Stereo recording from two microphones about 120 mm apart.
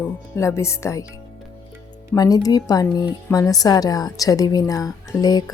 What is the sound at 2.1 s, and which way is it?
A woman's voice, 30° left (ahead or behind).